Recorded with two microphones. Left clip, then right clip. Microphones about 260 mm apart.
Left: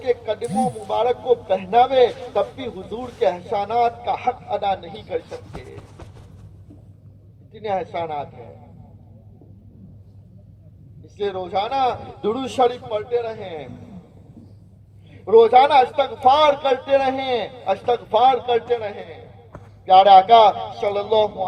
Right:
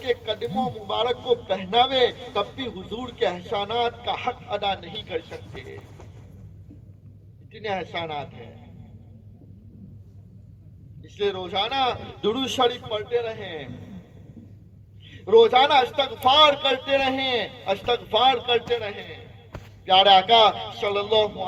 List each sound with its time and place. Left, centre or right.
0.0 s a man's voice: right
7.5 s a man's voice: right
11.0 s a man's voice: right
15.1 s a man's voice: right